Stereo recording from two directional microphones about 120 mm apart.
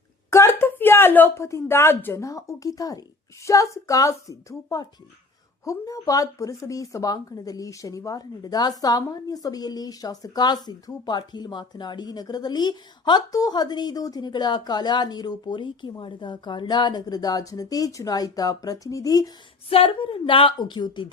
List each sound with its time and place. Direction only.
0.3 s a woman's voice: 20° left (ahead or behind)
19.7 s a woman's voice: 50° left (ahead or behind)